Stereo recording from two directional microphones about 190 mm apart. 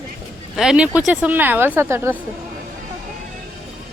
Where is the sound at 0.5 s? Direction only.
5° right (ahead or behind).